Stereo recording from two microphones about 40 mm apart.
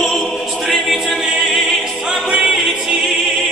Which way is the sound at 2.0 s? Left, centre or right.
Centre.